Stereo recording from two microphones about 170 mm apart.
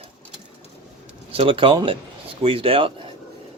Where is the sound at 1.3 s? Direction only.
35° right (ahead or behind).